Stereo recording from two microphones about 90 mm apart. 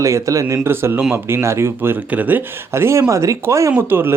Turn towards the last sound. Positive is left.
turn(degrees=-25)  # may be behind; listen again after turning